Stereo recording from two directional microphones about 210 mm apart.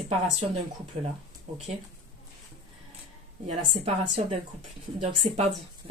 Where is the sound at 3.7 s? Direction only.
30° right (ahead or behind).